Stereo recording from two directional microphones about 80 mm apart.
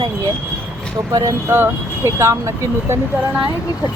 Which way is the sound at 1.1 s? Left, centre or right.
Right.